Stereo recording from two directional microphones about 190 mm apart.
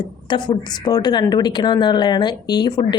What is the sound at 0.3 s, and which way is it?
A woman's voice, 25° left (ahead or behind).